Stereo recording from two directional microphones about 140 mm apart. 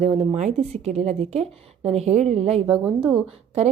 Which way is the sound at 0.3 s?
50° right (ahead or behind).